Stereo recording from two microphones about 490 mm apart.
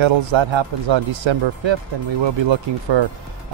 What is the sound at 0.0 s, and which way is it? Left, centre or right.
Speech, right.